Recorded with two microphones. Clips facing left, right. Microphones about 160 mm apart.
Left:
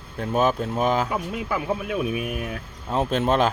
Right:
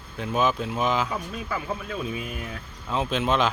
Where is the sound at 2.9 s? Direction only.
40° left (ahead or behind).